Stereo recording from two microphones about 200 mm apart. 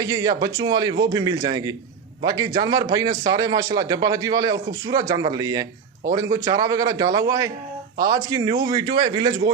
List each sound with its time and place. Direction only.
0.0 s a man's voice: 15° right (ahead or behind)